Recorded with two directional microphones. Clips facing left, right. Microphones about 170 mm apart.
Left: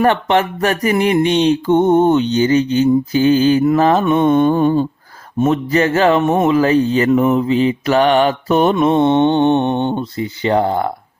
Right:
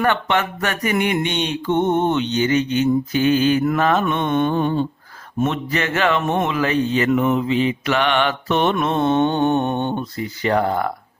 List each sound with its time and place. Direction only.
0.0 s mantra: 30° left (ahead or behind)
8.9 s speech: 20° left (ahead or behind)